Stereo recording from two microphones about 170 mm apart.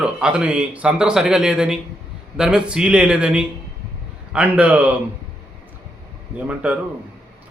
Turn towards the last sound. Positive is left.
turn(degrees=-10)  # may be behind; listen again after turning